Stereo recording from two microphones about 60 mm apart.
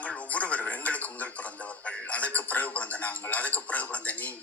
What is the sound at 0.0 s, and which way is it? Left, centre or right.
Music, left.